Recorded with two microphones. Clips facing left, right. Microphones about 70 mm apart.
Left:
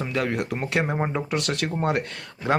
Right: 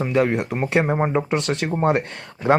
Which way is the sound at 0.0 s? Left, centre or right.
Right.